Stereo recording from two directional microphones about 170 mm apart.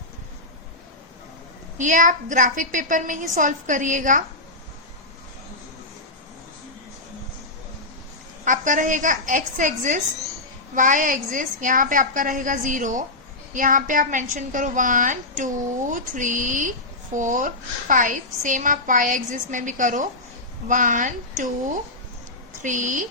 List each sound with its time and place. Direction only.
1.8 s speech: 50° right (ahead or behind)
8.4 s speech: 50° right (ahead or behind)